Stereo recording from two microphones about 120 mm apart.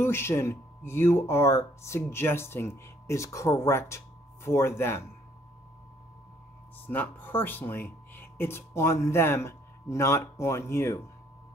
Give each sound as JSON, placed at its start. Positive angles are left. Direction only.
{"t": 0.0, "sound": "speech", "side_deg": 20}
{"t": 6.9, "sound": "speech", "side_deg": 15}